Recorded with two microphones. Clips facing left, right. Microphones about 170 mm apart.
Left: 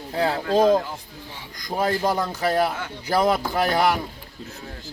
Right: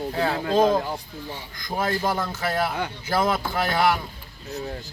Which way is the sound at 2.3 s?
35° left (ahead or behind).